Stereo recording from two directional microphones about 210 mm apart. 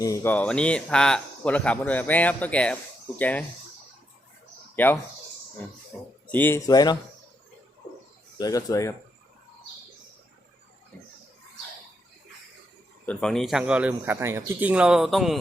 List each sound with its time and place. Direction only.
0.0 s speech: 15° left (ahead or behind)
4.7 s speech: 10° left (ahead or behind)
6.2 s speech: 10° left (ahead or behind)
8.4 s speech: 15° left (ahead or behind)
13.1 s a man's voice: 5° left (ahead or behind)